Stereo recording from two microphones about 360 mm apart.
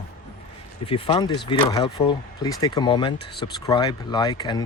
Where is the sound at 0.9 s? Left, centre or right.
Centre.